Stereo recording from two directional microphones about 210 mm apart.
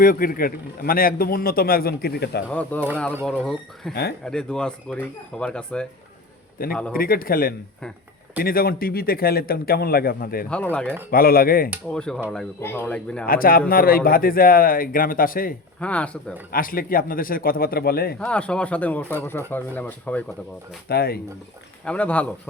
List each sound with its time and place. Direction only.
0.0 s a man's voice: 40° left (ahead or behind)
2.5 s speech: 5° left (ahead or behind)
6.6 s a man's voice: 45° left (ahead or behind)
10.5 s speech: 5° left (ahead or behind)
11.1 s a man's voice: 45° left (ahead or behind)
11.9 s speech: 5° left (ahead or behind)
13.2 s a man's voice: 45° left (ahead or behind)
15.8 s speech: 5° left (ahead or behind)
16.5 s a man's voice: 45° left (ahead or behind)
18.2 s speech: 5° left (ahead or behind)
20.8 s a man's voice: 50° left (ahead or behind)
21.8 s speech: 5° left (ahead or behind)